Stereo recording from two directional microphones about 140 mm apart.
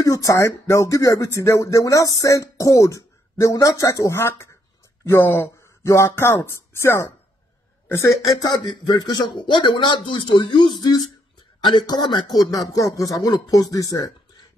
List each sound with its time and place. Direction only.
0.0 s speech: 25° left (ahead or behind)